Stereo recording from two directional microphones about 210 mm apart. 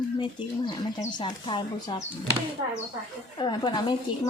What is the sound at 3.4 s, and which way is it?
Speech, 20° left (ahead or behind).